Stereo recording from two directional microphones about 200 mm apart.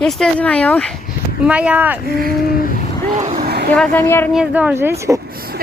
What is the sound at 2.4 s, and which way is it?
Vehicle, 50° left (ahead or behind).